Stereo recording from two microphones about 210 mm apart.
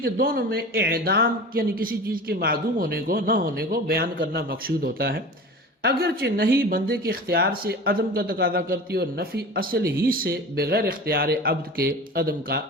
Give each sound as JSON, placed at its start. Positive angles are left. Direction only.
{"t": 0.0, "sound": "speech", "side_deg": -45}